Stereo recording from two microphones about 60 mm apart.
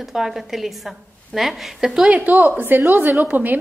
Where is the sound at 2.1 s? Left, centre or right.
Right.